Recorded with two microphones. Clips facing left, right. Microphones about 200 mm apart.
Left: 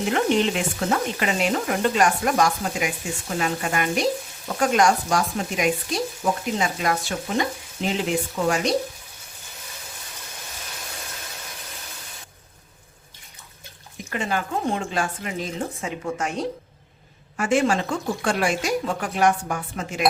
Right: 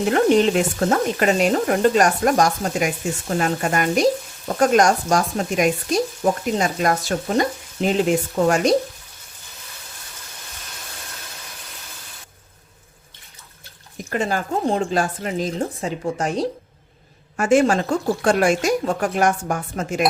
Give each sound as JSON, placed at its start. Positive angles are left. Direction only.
{"t": 0.1, "sound": "frying", "side_deg": -45}
{"t": 6.2, "sound": "speech", "side_deg": -40}
{"t": 6.6, "sound": "frying", "side_deg": -45}
{"t": 14.1, "sound": "speech", "side_deg": -40}
{"t": 17.3, "sound": "frying", "side_deg": -45}